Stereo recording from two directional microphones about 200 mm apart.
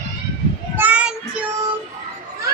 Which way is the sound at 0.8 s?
5° right (ahead or behind).